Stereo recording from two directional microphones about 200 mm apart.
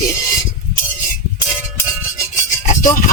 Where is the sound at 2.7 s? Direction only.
40° left (ahead or behind).